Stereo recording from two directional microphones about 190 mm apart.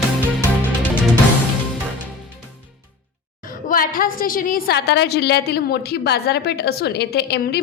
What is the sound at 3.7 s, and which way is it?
A woman's voice, 50° left (ahead or behind).